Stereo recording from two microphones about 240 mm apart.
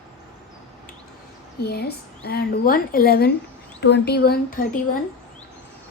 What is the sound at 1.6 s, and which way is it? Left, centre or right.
A woman's voice, left.